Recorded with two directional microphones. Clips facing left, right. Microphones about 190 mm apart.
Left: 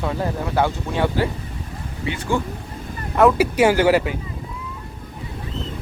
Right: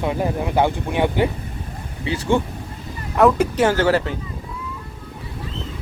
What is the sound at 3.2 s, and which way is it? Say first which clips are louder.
Speech: even; 5° left (ahead or behind).